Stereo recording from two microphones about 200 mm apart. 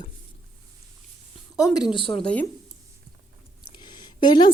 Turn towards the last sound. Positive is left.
turn(degrees=20)  # may be behind; listen again after turning